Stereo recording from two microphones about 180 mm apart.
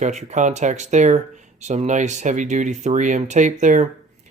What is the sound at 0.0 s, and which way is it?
Speech, 40° right (ahead or behind).